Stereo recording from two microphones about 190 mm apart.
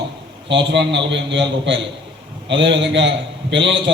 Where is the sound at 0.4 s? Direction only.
70° right (ahead or behind).